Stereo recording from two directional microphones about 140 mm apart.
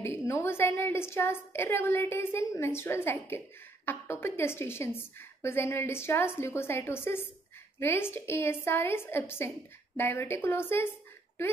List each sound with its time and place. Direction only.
0.0 s a woman's voice: 20° left (ahead or behind)